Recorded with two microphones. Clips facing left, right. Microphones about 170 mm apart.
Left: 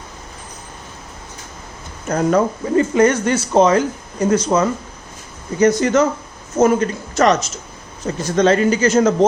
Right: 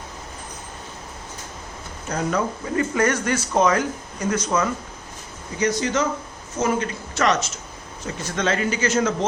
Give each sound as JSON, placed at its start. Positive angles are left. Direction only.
{"t": 2.0, "sound": "speech", "side_deg": 50}
{"t": 2.7, "sound": "speech", "side_deg": 25}
{"t": 5.5, "sound": "speech", "side_deg": 50}